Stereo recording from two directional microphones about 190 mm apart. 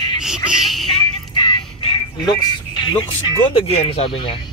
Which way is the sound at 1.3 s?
25° left (ahead or behind).